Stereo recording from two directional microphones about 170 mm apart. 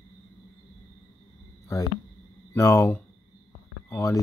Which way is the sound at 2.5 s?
15° left (ahead or behind).